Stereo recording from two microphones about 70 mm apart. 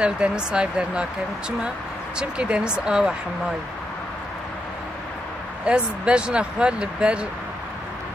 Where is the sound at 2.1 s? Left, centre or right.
Centre.